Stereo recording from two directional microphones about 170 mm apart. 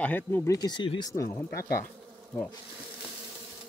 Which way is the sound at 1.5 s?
60° left (ahead or behind).